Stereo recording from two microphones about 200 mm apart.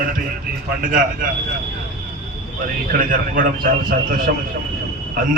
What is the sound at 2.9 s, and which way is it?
A man's voice, 45° right (ahead or behind).